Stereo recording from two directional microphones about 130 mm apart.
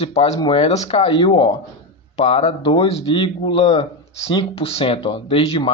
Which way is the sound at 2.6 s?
40° left (ahead or behind).